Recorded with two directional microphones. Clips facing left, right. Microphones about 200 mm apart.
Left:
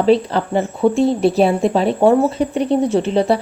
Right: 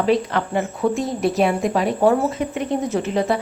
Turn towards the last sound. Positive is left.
turn(degrees=30)  # may be behind; listen again after turning